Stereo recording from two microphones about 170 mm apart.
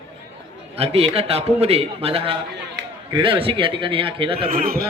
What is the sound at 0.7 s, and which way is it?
A man's voice, 35° right (ahead or behind).